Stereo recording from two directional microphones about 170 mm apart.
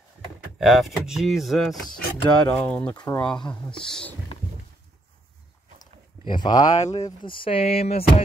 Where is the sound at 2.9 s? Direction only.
25° left (ahead or behind).